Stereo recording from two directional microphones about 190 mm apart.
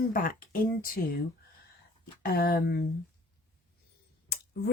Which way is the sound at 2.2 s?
50° left (ahead or behind).